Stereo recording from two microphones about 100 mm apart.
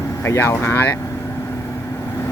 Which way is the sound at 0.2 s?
25° left (ahead or behind).